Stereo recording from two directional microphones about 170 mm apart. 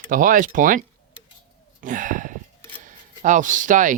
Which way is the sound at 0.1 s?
50° right (ahead or behind).